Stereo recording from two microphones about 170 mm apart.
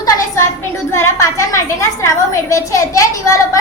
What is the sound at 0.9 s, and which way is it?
A woman's voice, 15° left (ahead or behind).